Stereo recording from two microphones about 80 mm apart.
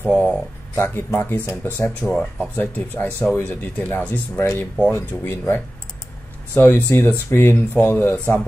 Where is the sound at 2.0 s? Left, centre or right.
Centre.